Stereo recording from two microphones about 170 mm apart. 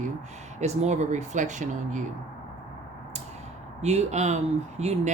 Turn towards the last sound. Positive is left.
turn(degrees=-40)  # may be behind; listen again after turning